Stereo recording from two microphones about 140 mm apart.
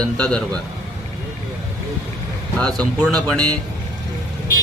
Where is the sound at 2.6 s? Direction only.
5° left (ahead or behind).